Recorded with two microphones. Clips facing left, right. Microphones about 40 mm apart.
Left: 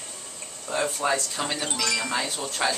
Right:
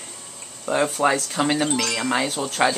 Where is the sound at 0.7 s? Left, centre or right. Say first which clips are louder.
Right 5 dB; right.